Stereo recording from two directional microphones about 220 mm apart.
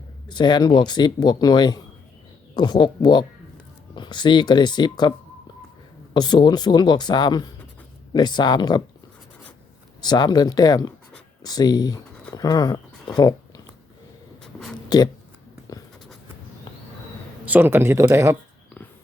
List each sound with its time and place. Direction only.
0.3 s speech: 20° left (ahead or behind)
6.1 s speech: 20° left (ahead or behind)
10.0 s speech: 20° left (ahead or behind)
14.4 s a sound: centre (ahead or behind)
14.8 s a sound: 15° left (ahead or behind)
17.4 s speech: 10° right (ahead or behind)